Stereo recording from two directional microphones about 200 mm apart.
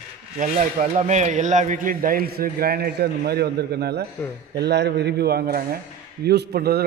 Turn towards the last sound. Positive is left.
turn(degrees=-50)  # may be behind; listen again after turning